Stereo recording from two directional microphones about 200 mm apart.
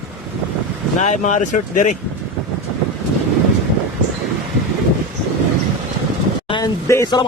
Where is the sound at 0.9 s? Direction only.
35° left (ahead or behind).